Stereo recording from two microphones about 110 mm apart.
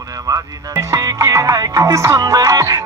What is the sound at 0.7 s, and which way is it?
Music, 30° right (ahead or behind).